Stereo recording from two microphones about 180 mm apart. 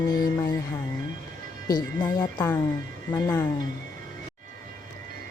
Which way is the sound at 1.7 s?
20° left (ahead or behind).